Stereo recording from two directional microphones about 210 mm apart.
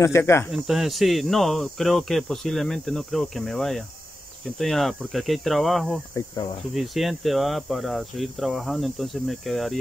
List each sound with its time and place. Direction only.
0.0 s cricket: 10° left (ahead or behind)
0.5 s speech: centre (ahead or behind)
6.1 s cricket: 15° left (ahead or behind)
6.7 s speech: centre (ahead or behind)